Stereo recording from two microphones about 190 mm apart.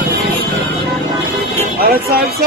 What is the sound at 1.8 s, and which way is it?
Music, 55° right (ahead or behind).